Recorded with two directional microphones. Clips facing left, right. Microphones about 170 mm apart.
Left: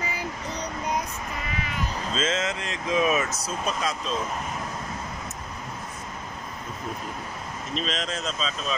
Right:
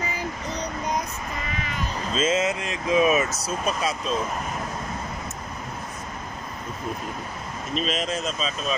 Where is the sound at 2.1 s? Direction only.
10° right (ahead or behind).